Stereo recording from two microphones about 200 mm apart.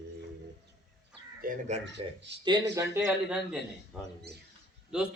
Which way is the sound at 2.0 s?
30° right (ahead or behind).